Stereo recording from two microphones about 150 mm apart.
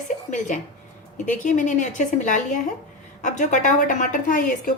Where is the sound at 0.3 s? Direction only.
55° left (ahead or behind).